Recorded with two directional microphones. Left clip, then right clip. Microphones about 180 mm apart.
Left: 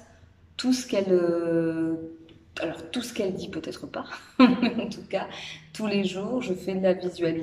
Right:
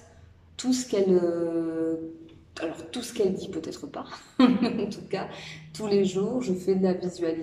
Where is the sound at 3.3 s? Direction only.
25° left (ahead or behind).